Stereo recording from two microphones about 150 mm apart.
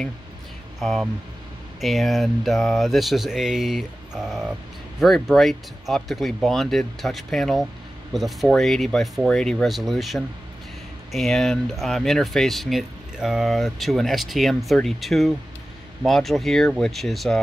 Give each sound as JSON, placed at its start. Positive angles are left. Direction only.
{"t": 0.7, "sound": "speech", "side_deg": 0}